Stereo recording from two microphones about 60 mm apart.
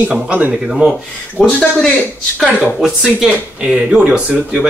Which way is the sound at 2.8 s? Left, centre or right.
Centre.